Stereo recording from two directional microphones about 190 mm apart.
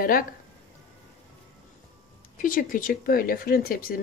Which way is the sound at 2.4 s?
45° left (ahead or behind).